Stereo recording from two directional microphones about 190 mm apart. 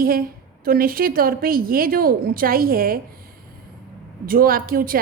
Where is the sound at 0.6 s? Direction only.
50° right (ahead or behind).